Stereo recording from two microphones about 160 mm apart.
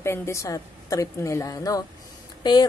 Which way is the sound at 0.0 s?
15° left (ahead or behind).